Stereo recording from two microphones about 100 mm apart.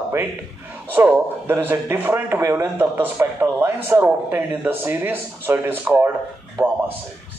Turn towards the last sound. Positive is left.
turn(degrees=-15)  # may be behind; listen again after turning